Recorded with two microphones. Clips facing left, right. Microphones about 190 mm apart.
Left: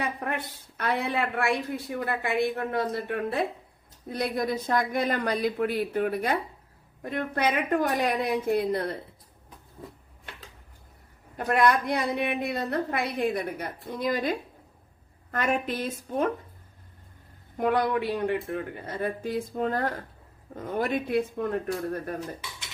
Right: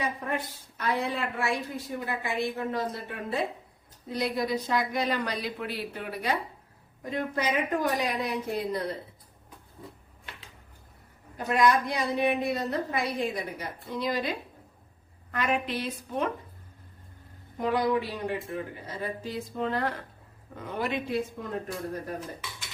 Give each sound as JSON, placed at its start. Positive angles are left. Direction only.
{"t": 0.8, "sound": "a woman's voice", "side_deg": 65}
{"t": 11.3, "sound": "a woman's voice", "side_deg": 55}
{"t": 17.6, "sound": "a woman's voice", "side_deg": 55}